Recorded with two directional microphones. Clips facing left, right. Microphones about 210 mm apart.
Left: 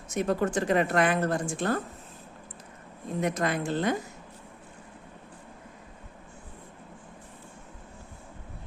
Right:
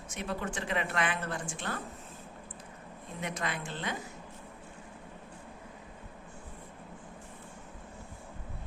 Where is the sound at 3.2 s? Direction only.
45° left (ahead or behind).